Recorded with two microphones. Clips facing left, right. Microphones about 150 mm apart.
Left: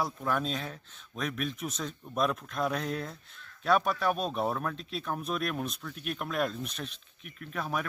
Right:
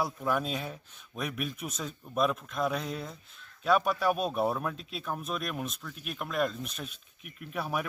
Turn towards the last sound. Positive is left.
turn(degrees=-10)  # may be behind; listen again after turning